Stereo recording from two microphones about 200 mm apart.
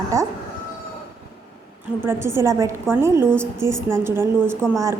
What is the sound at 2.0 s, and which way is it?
A woman's voice, 10° right (ahead or behind).